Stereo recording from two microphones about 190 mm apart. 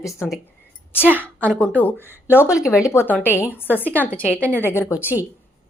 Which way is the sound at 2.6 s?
15° left (ahead or behind).